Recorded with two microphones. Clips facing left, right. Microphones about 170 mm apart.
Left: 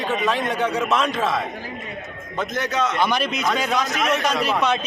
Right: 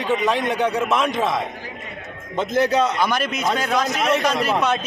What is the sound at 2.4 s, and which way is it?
Speech, 30° right (ahead or behind).